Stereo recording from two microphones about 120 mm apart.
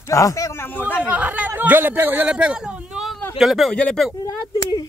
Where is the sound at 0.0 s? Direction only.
25° left (ahead or behind).